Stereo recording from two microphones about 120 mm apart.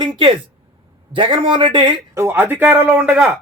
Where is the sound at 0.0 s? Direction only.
45° right (ahead or behind).